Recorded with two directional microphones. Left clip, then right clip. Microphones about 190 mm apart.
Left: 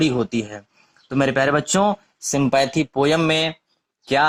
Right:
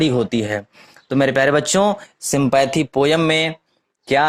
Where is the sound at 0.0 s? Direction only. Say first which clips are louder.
Right 3 dB; 30° right (ahead or behind).